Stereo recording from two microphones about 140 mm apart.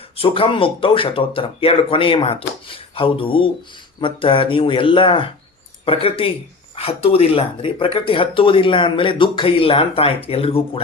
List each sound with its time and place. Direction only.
0.2 s speech: 40° left (ahead or behind)